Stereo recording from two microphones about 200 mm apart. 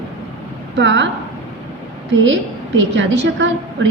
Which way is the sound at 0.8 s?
65° right (ahead or behind).